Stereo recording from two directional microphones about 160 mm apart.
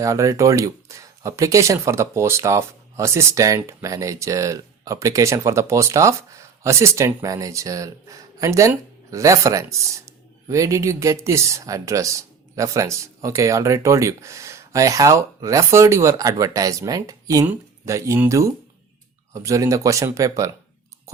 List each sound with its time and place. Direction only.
0.0 s speech: 20° right (ahead or behind)